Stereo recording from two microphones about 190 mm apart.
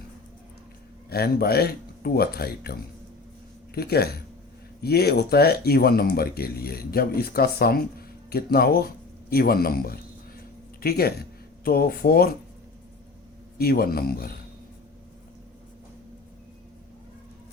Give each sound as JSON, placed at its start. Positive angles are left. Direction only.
{"t": 1.1, "sound": "speech", "side_deg": 55}
{"t": 3.8, "sound": "speech", "side_deg": 55}
{"t": 13.6, "sound": "speech", "side_deg": 55}